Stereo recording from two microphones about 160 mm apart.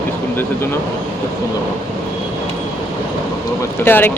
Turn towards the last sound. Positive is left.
turn(degrees=15)  # may be behind; listen again after turning